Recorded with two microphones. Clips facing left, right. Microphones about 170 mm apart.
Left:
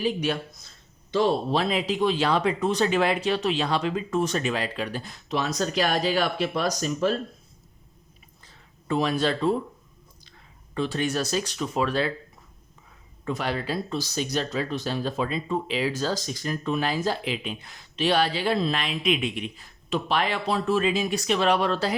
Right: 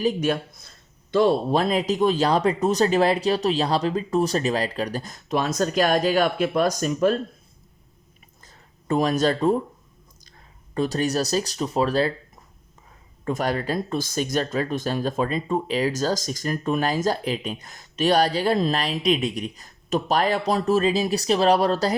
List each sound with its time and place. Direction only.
0.0 s speech: 45° right (ahead or behind)
8.4 s a sound: 45° right (ahead or behind)
10.8 s speech: 40° right (ahead or behind)
13.2 s speech: 45° right (ahead or behind)